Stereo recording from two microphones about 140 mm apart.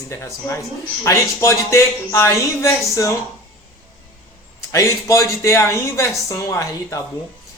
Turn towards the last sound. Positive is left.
turn(degrees=20)  # may be behind; listen again after turning